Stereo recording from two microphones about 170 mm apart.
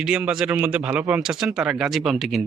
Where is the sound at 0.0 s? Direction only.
5° right (ahead or behind).